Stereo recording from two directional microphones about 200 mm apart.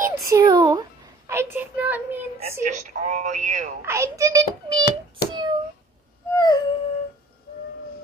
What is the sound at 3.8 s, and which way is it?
Child singing, 15° right (ahead or behind).